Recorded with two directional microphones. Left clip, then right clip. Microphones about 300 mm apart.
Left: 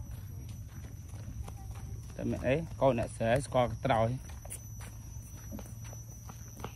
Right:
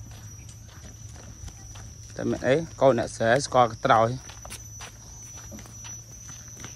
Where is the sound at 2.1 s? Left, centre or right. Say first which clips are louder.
Right 8 dB; right.